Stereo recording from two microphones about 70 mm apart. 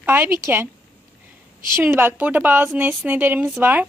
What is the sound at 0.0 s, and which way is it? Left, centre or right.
Speech, right.